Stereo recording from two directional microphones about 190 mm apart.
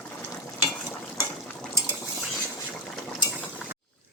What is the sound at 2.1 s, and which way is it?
Cutlery, centre (ahead or behind).